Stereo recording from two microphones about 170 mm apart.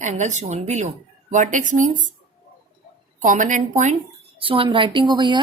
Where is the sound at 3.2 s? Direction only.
50° right (ahead or behind).